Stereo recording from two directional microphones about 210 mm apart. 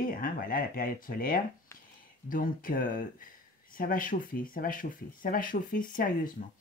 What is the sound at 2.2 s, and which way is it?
Speech, 40° left (ahead or behind).